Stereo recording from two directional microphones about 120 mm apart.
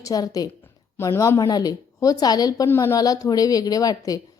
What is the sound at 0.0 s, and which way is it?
A woman's voice, 30° left (ahead or behind).